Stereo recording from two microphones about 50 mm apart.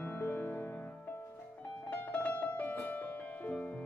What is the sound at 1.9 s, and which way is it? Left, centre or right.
Music, left.